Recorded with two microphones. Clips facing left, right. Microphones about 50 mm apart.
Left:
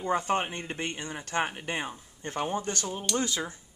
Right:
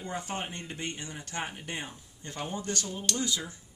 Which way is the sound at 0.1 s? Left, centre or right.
Left.